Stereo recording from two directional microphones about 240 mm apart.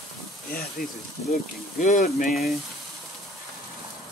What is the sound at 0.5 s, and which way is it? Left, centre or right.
Speech, left.